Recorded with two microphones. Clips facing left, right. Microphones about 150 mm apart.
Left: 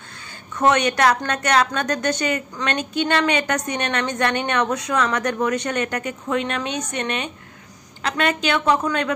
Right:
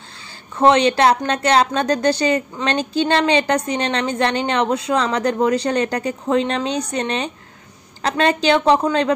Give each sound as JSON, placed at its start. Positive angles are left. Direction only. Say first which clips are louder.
{"t": 0.6, "sound": "a woman's voice", "louder": "right 4 dB", "side_deg": -25}